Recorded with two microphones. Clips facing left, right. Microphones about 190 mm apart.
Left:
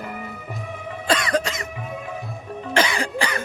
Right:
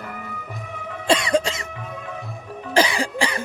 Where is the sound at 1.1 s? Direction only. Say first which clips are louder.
Right 3 dB; 30° right (ahead or behind).